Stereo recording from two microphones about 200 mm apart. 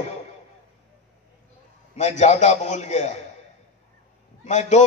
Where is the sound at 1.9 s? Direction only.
35° left (ahead or behind).